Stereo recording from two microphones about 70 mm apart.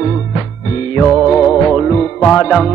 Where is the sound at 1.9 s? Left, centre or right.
Centre.